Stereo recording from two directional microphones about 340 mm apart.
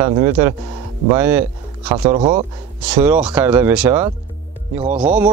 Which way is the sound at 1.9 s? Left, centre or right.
Centre.